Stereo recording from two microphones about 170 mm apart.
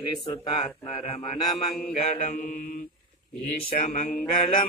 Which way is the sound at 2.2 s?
55° left (ahead or behind).